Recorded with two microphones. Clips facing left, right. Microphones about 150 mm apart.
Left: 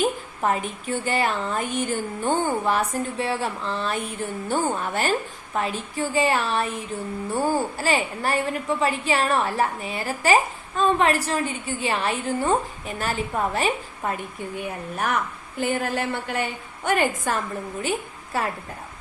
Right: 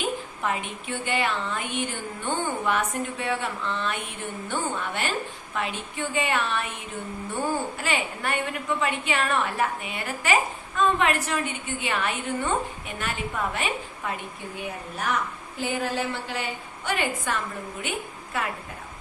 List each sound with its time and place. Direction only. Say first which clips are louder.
0.0 s a woman's voice: left 5 dB; 40° left (ahead or behind)
15.8 s a woman's voice: left 2 dB; 50° left (ahead or behind); by 18.5 s 35° left (ahead or behind)